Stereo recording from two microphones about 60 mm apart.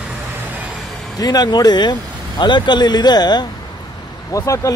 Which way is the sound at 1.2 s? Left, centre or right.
Left.